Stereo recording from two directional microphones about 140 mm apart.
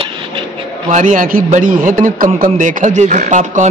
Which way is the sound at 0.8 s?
65° right (ahead or behind).